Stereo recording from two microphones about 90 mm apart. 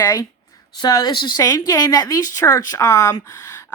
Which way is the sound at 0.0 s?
40° left (ahead or behind).